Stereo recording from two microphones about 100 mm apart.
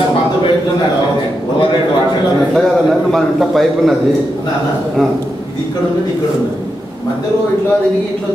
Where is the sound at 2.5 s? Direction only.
Centre (ahead or behind).